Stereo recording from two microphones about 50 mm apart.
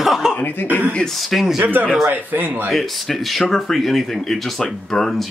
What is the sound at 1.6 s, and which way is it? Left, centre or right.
A man's voice, right.